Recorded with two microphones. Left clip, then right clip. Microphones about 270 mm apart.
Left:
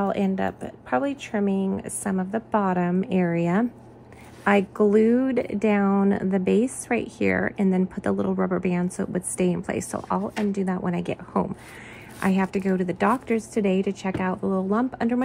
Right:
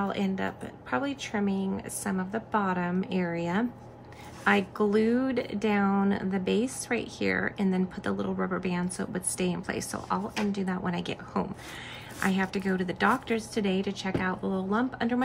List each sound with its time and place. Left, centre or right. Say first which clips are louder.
0.0 s speech: left 6 dB; left